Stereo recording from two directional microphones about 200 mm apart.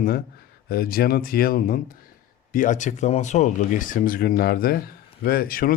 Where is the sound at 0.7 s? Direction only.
50° left (ahead or behind).